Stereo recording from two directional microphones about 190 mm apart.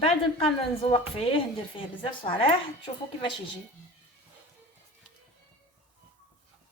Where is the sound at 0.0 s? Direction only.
30° left (ahead or behind).